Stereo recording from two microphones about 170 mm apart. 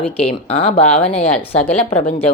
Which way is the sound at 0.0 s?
35° left (ahead or behind).